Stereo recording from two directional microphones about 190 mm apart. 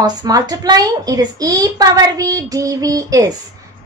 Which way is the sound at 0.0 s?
20° right (ahead or behind).